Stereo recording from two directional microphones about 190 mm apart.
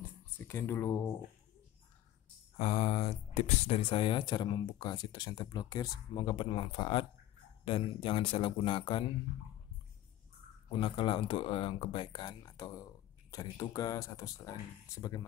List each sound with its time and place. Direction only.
0.4 s speech: 10° left (ahead or behind)
2.6 s speech: 35° left (ahead or behind)
10.7 s speech: 30° left (ahead or behind)